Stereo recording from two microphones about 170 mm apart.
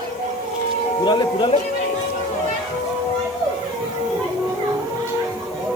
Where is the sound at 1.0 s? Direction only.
25° left (ahead or behind).